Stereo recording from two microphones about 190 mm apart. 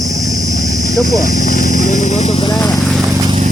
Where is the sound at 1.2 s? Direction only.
45° left (ahead or behind).